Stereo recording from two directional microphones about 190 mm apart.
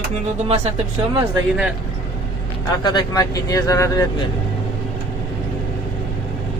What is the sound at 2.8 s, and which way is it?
Speech, 20° left (ahead or behind).